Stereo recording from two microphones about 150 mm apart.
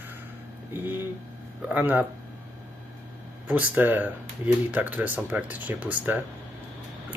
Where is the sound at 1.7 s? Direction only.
10° right (ahead or behind).